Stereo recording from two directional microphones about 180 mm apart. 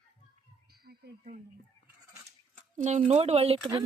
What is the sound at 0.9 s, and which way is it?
Speech, 45° right (ahead or behind).